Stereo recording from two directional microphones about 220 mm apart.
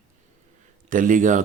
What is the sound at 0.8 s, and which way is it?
Speech, 35° right (ahead or behind).